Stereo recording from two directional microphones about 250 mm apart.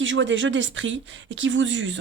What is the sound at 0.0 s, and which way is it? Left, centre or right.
Speech, right.